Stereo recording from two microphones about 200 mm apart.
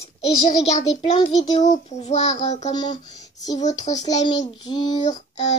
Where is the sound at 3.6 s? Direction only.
35° left (ahead or behind).